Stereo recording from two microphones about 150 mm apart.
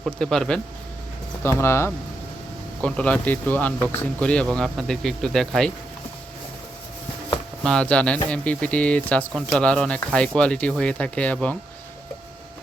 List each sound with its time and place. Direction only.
0.0 s speech: 5° left (ahead or behind)
1.5 s speech: 15° left (ahead or behind)
7.6 s speech: 5° left (ahead or behind)